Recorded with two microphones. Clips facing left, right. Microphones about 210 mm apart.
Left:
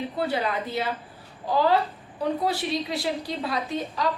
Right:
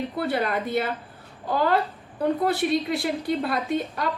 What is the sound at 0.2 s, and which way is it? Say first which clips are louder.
Speech: right 1 dB; 55° right (ahead or behind).